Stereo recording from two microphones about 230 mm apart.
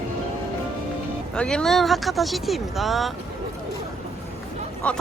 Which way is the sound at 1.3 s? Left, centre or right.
Centre.